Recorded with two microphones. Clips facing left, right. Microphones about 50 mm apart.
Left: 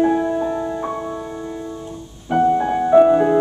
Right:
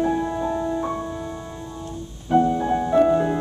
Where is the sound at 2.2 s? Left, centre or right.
Left.